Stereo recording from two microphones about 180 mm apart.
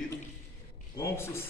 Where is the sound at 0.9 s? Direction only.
15° left (ahead or behind).